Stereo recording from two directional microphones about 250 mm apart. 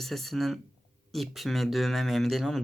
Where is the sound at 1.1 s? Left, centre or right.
Centre.